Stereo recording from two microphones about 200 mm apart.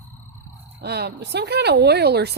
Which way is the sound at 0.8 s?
55° right (ahead or behind).